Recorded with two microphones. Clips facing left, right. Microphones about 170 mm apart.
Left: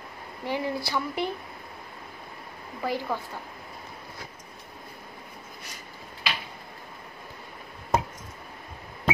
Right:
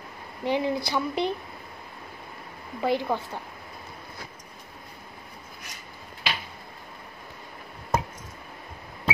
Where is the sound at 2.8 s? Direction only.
20° right (ahead or behind).